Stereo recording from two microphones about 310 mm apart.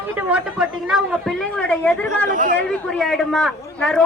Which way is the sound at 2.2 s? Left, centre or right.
Right.